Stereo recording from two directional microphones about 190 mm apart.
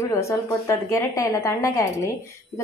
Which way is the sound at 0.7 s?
15° left (ahead or behind).